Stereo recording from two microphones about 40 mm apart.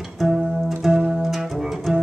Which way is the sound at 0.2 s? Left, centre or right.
Centre.